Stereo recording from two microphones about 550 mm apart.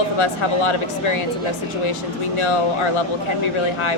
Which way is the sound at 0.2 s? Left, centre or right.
Left.